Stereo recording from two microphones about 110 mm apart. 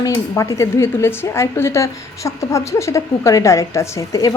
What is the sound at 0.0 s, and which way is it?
A woman's voice, 30° left (ahead or behind).